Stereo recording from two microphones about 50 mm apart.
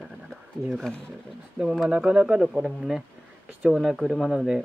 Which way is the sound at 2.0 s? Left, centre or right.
Centre.